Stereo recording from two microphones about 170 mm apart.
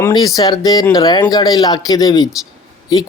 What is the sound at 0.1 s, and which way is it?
Speech, 20° left (ahead or behind).